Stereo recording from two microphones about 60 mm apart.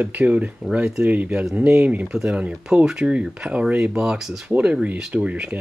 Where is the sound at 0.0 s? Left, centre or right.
Right.